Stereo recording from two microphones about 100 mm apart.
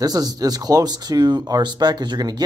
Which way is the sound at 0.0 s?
40° right (ahead or behind).